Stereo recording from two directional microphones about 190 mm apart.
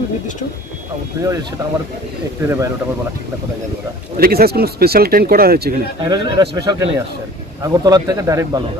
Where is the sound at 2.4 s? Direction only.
15° right (ahead or behind).